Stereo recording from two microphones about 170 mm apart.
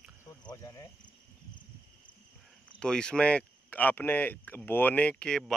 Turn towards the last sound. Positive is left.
turn(degrees=5)  # may be behind; listen again after turning